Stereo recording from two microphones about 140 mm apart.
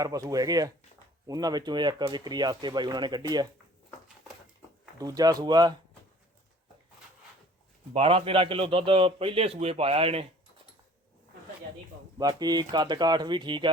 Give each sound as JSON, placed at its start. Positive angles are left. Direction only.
{"t": 0.0, "sound": "a man's voice", "side_deg": -25}
{"t": 4.9, "sound": "speech", "side_deg": -25}
{"t": 7.9, "sound": "a man's voice", "side_deg": -40}
{"t": 12.1, "sound": "a man's voice", "side_deg": -25}